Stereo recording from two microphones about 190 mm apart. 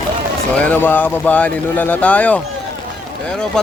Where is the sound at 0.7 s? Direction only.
10° left (ahead or behind).